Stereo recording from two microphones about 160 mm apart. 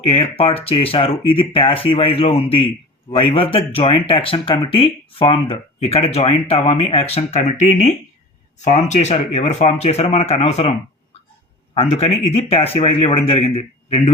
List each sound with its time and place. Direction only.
0.1 s speech: 35° left (ahead or behind)